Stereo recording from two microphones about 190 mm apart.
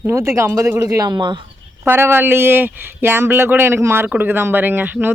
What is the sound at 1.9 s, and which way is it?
Speech, 10° right (ahead or behind).